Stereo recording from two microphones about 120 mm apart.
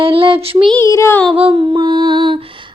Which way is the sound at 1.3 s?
50° right (ahead or behind).